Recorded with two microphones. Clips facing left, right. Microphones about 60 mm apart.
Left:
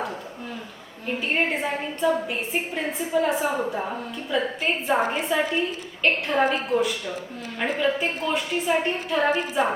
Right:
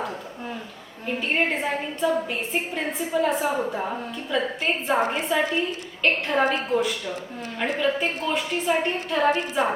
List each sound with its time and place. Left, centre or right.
1.3 s a woman's voice: centre